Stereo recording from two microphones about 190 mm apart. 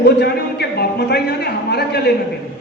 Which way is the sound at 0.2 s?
60° left (ahead or behind).